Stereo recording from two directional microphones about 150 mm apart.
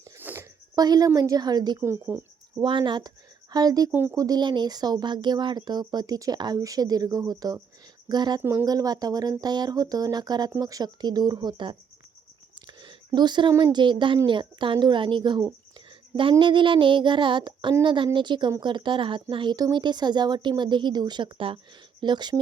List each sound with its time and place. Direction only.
0.2 s a sound: 15° right (ahead or behind)
0.8 s speech: 25° right (ahead or behind)
1.8 s speech: 15° right (ahead or behind)
2.6 s speech: 30° right (ahead or behind)
8.4 s speech: 15° right (ahead or behind); by 11.8 s 30° right (ahead or behind)
12.5 s a sound: 30° right (ahead or behind)
13.5 s speech: 20° right (ahead or behind)
13.7 s speech: 30° right (ahead or behind)
15.9 s a sound: 35° right (ahead or behind)
16.4 s speech: 35° right (ahead or behind)